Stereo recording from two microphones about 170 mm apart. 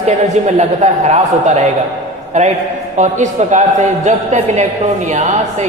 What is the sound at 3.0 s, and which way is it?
A man's voice, 45° right (ahead or behind).